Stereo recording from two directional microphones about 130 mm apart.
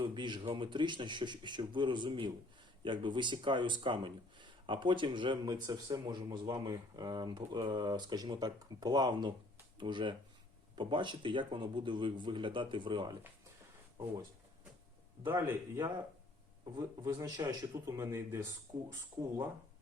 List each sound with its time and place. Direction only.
0.0 s speech: 40° right (ahead or behind)
15.2 s speech: 20° right (ahead or behind)
16.7 s speech: 35° right (ahead or behind)